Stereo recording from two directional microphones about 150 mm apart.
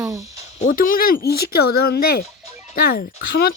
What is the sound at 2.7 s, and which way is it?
Speech, 70° left (ahead or behind).